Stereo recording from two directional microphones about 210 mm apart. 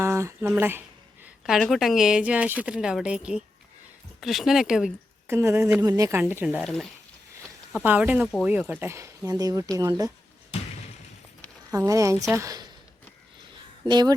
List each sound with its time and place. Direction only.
0.0 s speech: 15° right (ahead or behind)
7.9 s speech: 5° right (ahead or behind)
11.7 s speech: 15° right (ahead or behind)
13.8 s speech: 20° right (ahead or behind)